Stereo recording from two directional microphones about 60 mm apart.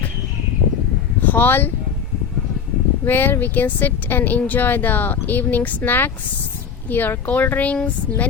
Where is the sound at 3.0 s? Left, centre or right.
Left.